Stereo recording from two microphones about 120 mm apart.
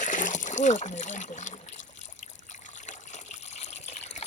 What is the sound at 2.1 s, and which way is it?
Water, 90° left.